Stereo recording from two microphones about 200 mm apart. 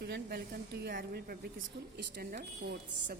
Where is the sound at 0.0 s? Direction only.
55° right (ahead or behind).